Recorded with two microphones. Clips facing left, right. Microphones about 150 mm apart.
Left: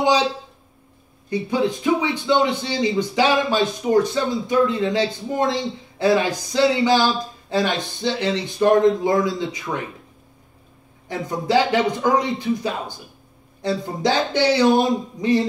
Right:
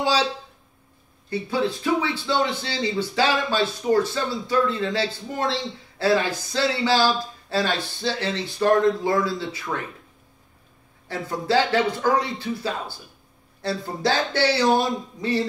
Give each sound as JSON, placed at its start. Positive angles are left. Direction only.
{"t": 0.0, "sound": "a sound", "side_deg": 15}
{"t": 1.3, "sound": "speech", "side_deg": 15}
{"t": 11.1, "sound": "speech", "side_deg": 15}